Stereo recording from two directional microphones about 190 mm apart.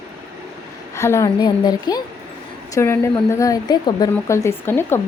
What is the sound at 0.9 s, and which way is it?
A woman's voice, 15° left (ahead or behind).